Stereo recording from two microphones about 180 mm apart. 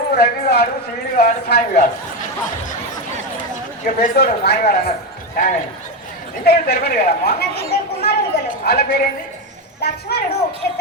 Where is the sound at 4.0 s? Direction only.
60° left (ahead or behind).